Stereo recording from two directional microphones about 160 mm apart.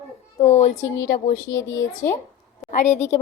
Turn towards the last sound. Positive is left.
turn(degrees=45)  # may be behind; listen again after turning